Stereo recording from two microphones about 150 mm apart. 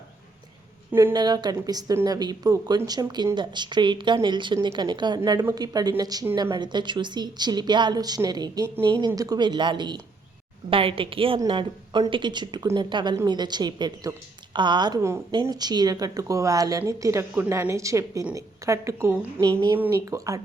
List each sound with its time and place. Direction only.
1.1 s a woman's voice: 25° right (ahead or behind)